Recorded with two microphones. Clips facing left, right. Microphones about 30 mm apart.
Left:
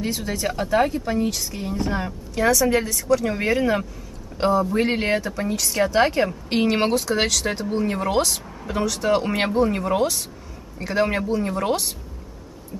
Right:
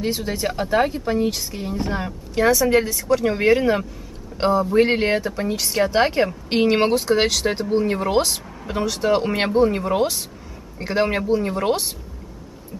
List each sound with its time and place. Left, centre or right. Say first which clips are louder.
0.0 s speech: right 2 dB; centre